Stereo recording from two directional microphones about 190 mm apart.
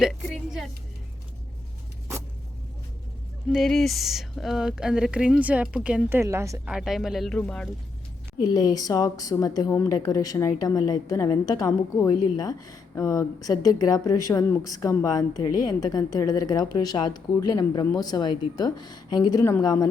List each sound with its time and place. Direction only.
0.0 s a sound: centre (ahead or behind)
3.5 s speech: centre (ahead or behind); by 6.6 s 15° right (ahead or behind)
6.7 s speech: 5° right (ahead or behind)
8.4 s a woman's voice: 20° left (ahead or behind)